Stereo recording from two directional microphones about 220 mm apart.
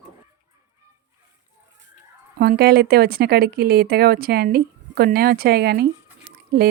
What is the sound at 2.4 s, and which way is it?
Speech, 45° right (ahead or behind).